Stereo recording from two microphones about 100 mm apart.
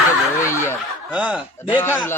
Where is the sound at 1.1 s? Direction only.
15° right (ahead or behind).